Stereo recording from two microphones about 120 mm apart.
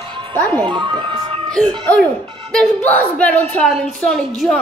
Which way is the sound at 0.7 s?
40° right (ahead or behind).